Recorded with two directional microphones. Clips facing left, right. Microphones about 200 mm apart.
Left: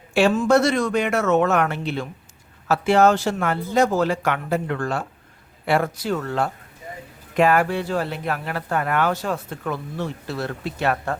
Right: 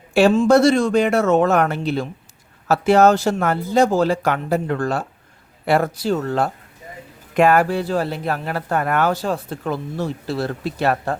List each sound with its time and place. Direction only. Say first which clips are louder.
0.1 s speech: right 4 dB; 40° right (ahead or behind)